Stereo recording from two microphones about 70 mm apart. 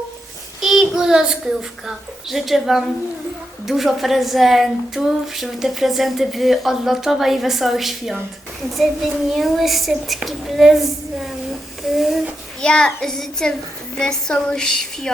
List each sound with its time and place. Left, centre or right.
0.6 s a child's voice: centre
11.8 s a sound: centre
12.6 s a woman's voice: centre